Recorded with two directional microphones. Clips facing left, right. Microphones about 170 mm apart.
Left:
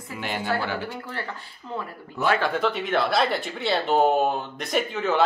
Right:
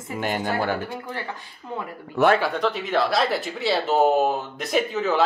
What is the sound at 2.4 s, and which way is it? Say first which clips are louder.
Speech: even; centre (ahead or behind).